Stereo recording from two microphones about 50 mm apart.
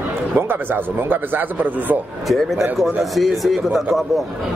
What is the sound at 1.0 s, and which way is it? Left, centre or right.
Speech, right.